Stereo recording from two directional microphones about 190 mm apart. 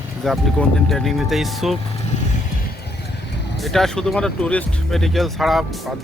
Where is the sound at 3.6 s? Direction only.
Centre (ahead or behind).